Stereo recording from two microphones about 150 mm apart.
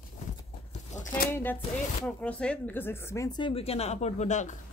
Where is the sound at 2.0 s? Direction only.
5° left (ahead or behind); by 4.5 s 55° left (ahead or behind).